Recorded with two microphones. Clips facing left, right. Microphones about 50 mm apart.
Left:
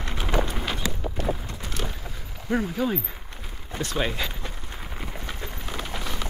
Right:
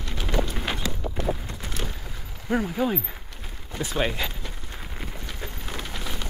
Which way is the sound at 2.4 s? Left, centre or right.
Centre.